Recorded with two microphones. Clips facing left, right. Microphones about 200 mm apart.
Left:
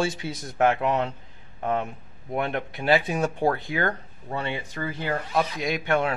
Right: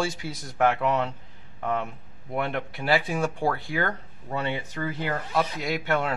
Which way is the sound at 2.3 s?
20° left (ahead or behind).